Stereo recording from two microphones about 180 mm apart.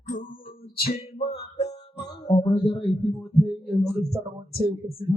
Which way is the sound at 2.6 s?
5° left (ahead or behind).